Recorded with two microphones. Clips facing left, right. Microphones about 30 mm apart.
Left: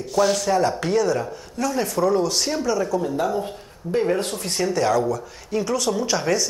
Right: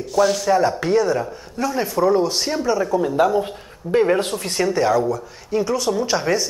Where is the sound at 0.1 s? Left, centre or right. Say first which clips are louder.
Right 2 dB; centre.